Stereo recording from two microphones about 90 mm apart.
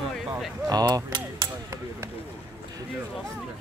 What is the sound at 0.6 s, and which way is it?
Speech, 45° right (ahead or behind).